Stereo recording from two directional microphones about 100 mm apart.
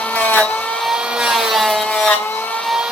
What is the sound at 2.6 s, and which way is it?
Vehicle, 5° right (ahead or behind).